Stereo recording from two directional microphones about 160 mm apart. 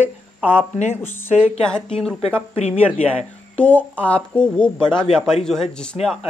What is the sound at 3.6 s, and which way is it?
Speech, 10° left (ahead or behind).